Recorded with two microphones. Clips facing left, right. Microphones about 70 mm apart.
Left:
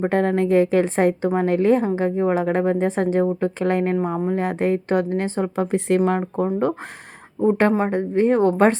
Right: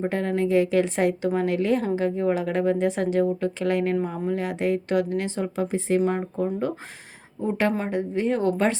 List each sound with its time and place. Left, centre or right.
0.0 s speech: left
3.9 s speech: left
5.7 s speech: left
7.4 s a woman's voice: left
7.9 s speech: left